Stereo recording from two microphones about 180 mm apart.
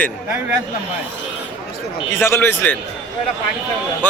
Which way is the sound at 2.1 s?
15° left (ahead or behind).